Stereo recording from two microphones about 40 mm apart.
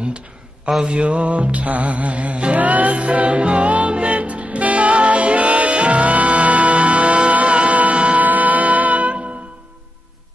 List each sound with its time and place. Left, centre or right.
0.8 s music: right